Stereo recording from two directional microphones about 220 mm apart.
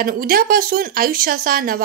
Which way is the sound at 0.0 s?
40° right (ahead or behind).